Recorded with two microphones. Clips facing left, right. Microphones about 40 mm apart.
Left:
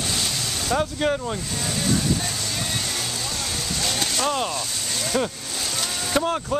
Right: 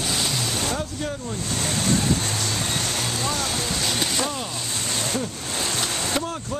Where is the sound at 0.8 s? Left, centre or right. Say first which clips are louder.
Left 6 dB; left.